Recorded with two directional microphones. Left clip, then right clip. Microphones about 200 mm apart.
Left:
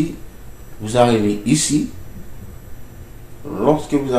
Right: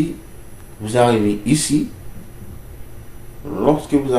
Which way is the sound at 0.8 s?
5° right (ahead or behind).